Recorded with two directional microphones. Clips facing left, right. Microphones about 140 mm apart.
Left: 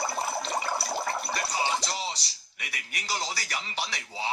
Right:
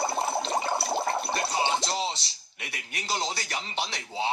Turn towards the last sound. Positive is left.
turn(degrees=-25)  # may be behind; listen again after turning